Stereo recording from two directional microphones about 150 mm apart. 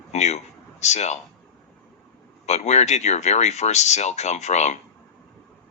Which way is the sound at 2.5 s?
50° left (ahead or behind).